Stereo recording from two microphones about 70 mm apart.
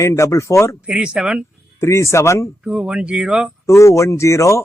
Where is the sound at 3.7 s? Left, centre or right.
Left.